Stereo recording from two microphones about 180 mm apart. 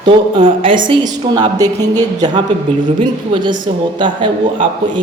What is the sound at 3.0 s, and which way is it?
A man's voice, 25° right (ahead or behind).